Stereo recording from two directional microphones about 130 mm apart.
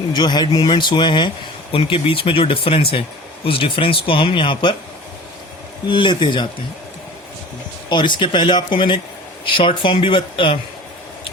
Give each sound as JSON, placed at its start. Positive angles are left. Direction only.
{"t": 0.1, "sound": "speech", "side_deg": 35}
{"t": 5.9, "sound": "speech", "side_deg": 35}
{"t": 7.9, "sound": "speech", "side_deg": 35}